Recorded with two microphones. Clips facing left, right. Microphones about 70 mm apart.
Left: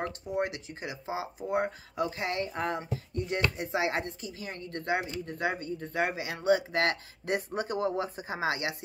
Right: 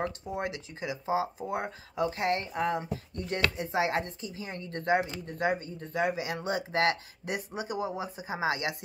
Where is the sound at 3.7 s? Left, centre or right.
Right.